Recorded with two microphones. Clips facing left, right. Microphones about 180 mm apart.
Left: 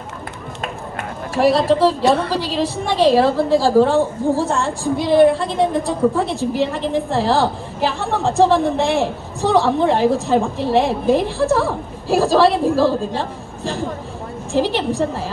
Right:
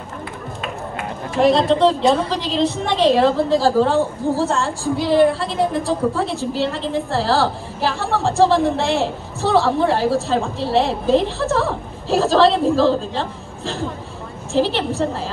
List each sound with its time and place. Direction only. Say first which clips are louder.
1.3 s a woman's voice: even; 5° left (ahead or behind)
6.1 s a woman's voice: left 3 dB; 15° left (ahead or behind)